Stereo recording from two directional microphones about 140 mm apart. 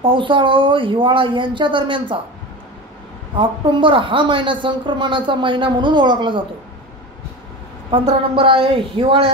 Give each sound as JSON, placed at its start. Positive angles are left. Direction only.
{"t": 0.0, "sound": "a woman's voice", "side_deg": -35}
{"t": 3.3, "sound": "a woman's voice", "side_deg": -35}
{"t": 7.9, "sound": "a woman's voice", "side_deg": -40}